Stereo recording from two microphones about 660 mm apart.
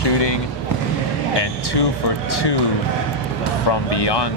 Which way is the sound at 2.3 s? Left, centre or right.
Left.